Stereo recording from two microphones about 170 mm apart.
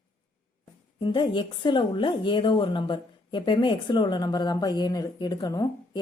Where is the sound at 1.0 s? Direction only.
25° left (ahead or behind).